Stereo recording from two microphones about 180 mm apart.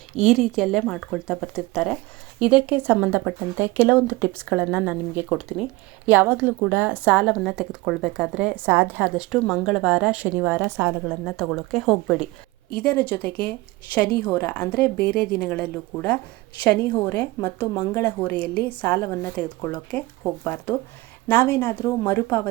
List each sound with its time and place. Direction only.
0.3 s a woman's voice: centre (ahead or behind)
11.1 s a woman's voice: 10° left (ahead or behind)